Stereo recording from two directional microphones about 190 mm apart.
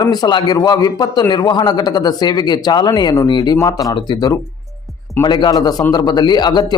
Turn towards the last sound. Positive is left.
turn(degrees=20)  # may be behind; listen again after turning